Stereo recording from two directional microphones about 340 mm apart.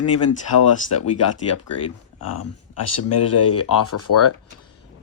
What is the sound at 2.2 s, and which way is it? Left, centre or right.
Speech, left.